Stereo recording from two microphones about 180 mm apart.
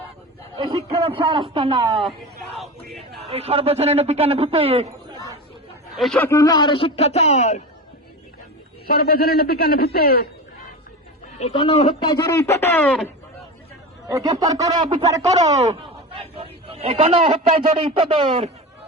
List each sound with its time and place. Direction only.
0.5 s a man's voice: 30° right (ahead or behind)
3.2 s a man's voice: 35° right (ahead or behind)
6.0 s a man's voice: centre (ahead or behind)
6.2 s speech: 20° left (ahead or behind); by 7.6 s 40° left (ahead or behind)
8.9 s a man's voice: 55° left (ahead or behind)
11.3 s speech: 35° left (ahead or behind)
12.1 s speech: 15° left (ahead or behind)
14.1 s a man's voice: 20° right (ahead or behind)
15.7 s a sound: 30° right (ahead or behind)
17.9 s a man's voice: 30° right (ahead or behind)